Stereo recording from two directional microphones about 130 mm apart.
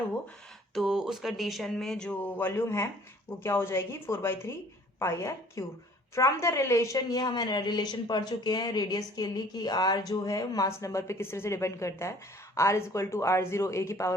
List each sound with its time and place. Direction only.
0.7 s speech: centre (ahead or behind)
2.5 s a woman's voice: 20° left (ahead or behind)